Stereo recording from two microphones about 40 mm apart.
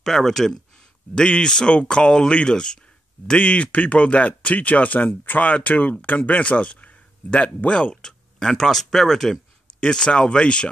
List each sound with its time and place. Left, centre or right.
0.0 s speech: centre
1.1 s speech: left
3.3 s speech: left
5.4 s speech: left
8.0 s speech: centre